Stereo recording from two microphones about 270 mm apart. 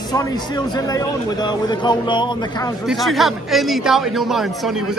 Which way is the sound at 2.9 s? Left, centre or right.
Centre.